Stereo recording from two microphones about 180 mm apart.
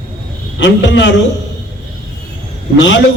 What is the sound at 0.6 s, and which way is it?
Speech, 85° left.